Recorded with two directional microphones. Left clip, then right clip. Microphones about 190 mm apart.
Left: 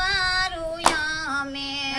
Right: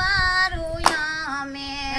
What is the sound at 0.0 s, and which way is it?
Singing, 25° left (ahead or behind).